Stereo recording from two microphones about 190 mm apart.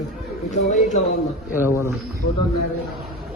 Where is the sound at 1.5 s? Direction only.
10° right (ahead or behind).